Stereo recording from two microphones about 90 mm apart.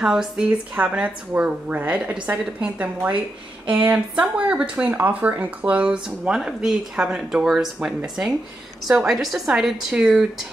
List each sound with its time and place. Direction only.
0.0 s a woman's voice: 5° right (ahead or behind)